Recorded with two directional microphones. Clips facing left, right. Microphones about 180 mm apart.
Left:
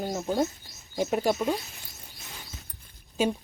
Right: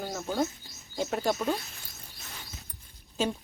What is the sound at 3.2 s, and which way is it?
Speech, 10° left (ahead or behind).